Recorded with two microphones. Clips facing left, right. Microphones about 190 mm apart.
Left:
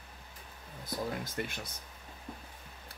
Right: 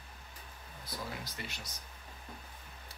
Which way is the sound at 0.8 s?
50° left (ahead or behind).